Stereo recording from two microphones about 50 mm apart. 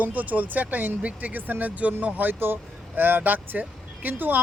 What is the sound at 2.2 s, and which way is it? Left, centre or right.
Speech, right.